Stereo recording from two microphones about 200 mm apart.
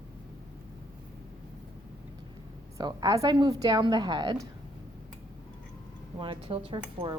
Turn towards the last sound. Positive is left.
turn(degrees=-30)  # may be behind; listen again after turning